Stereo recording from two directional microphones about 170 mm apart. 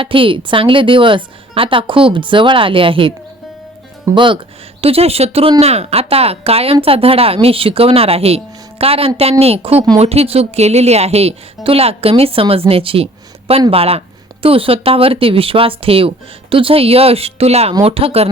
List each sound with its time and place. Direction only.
0.0 s speech: 30° right (ahead or behind)